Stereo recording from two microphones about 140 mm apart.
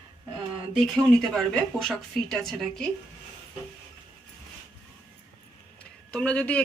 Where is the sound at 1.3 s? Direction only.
5° left (ahead or behind).